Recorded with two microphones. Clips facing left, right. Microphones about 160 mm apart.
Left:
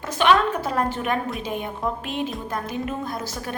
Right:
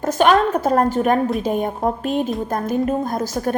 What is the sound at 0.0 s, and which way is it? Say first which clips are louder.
A woman's voice: right 4 dB; 45° right (ahead or behind).